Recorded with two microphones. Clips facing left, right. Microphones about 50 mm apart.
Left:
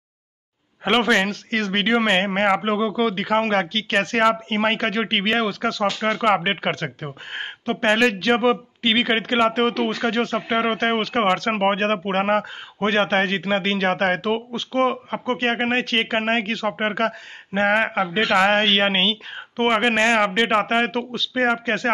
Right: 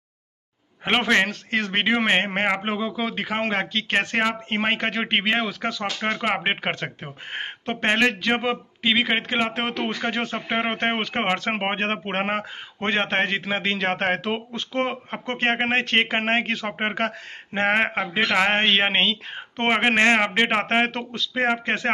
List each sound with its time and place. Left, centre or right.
0.8 s speech: centre
9.5 s speech: right
18.9 s speech: right
19.7 s speech: centre
20.6 s speech: right